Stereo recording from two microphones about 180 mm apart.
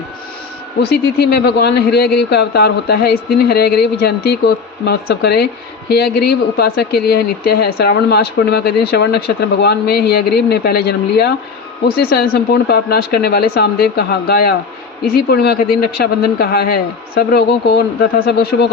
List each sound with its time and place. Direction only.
0.8 s speech: 65° left (ahead or behind)